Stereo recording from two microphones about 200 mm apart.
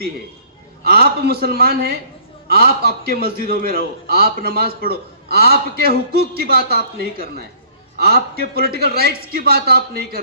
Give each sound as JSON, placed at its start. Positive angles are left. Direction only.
{"t": 0.9, "sound": "a man's voice", "side_deg": -50}